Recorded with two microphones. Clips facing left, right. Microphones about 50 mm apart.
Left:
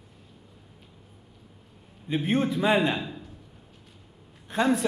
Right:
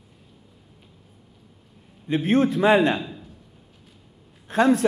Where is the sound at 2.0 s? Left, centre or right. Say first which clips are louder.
Right 5 dB; centre.